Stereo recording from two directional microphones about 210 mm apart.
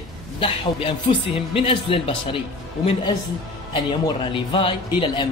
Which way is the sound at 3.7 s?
25° left (ahead or behind).